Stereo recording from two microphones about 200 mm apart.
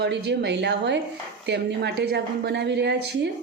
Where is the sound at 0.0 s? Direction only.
60° right (ahead or behind).